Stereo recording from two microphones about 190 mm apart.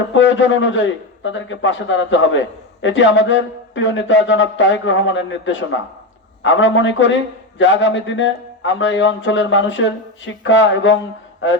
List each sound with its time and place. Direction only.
0.1 s a man's voice: 75° left (ahead or behind)